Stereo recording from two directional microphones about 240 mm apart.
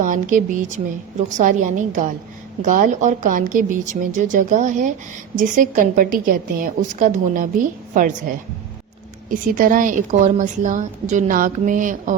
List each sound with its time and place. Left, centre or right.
0.0 s a woman's voice: right